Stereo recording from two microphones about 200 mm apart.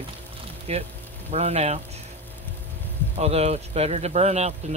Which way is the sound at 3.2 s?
30° right (ahead or behind).